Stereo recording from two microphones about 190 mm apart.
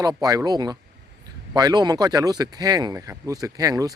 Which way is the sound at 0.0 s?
20° right (ahead or behind).